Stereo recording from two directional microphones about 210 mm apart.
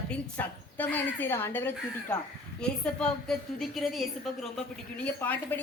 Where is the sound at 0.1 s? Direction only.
10° left (ahead or behind).